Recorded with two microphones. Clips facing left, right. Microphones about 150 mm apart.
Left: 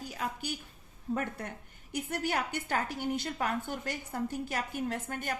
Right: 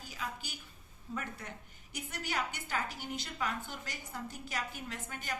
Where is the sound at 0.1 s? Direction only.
55° left (ahead or behind).